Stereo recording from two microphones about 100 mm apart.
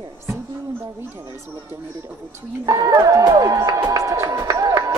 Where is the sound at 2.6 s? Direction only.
35° right (ahead or behind).